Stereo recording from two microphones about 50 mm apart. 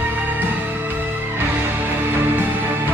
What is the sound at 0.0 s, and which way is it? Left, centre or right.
Music, right.